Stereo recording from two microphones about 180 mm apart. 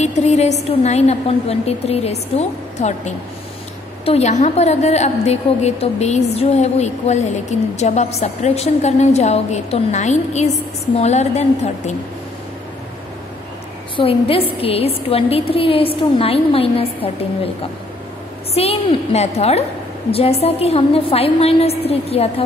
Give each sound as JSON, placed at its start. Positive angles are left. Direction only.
{"t": 0.0, "sound": "a woman's voice", "side_deg": 40}
{"t": 13.9, "sound": "a woman's voice", "side_deg": 30}
{"t": 18.5, "sound": "a woman's voice", "side_deg": 35}